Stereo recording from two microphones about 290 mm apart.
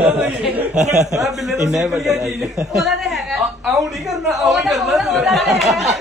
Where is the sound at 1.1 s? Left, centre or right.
Centre.